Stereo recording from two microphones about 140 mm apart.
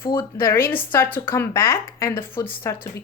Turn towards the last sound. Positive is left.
turn(degrees=20)  # may be behind; listen again after turning